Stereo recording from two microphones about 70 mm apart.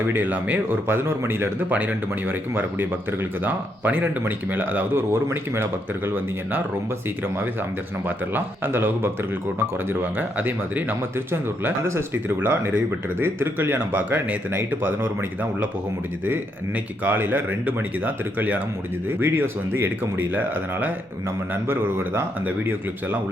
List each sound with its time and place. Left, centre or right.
0.1 s speech: right
1.7 s speech: right
8.0 s speech: right
16.2 s speech: right